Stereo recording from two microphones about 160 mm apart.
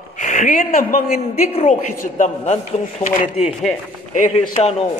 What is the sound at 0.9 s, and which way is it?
Speech, 70° left (ahead or behind).